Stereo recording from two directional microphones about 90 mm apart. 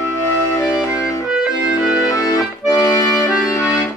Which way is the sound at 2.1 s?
40° left (ahead or behind).